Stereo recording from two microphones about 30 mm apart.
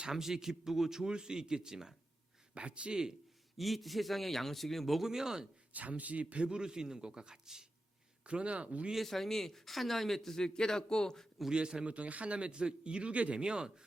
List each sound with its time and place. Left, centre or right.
0.0 s speech: centre
2.6 s a man's voice: right
3.6 s speech: centre
4.9 s speech: centre
5.7 s speech: right
6.6 s a man's voice: right
8.5 s speech: right
9.0 s speech: centre
10.3 s a man's voice: left
11.5 s a man's voice: right
11.9 s a man's voice: right
13.4 s speech: right